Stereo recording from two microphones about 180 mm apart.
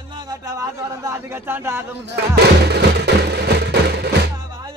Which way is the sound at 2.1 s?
65° right (ahead or behind).